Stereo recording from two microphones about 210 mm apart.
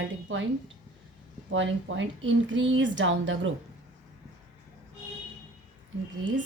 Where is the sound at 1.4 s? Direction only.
60° right (ahead or behind).